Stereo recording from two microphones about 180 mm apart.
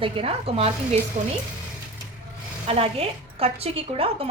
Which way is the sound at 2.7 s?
35° right (ahead or behind).